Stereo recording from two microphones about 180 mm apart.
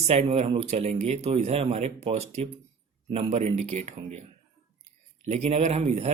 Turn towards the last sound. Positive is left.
turn(degrees=-35)  # may be behind; listen again after turning